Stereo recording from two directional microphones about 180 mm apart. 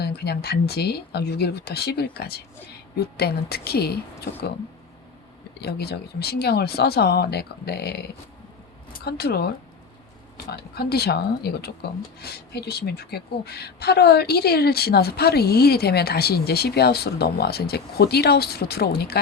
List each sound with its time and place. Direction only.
0.0 s speech: 65° left (ahead or behind)
5.5 s speech: 60° left (ahead or behind)